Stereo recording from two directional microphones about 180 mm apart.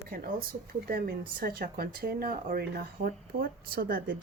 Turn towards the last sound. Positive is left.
turn(degrees=-55)  # may be behind; listen again after turning